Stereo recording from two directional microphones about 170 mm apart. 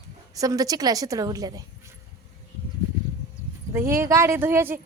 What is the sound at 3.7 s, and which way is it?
A woman's voice, 15° right (ahead or behind).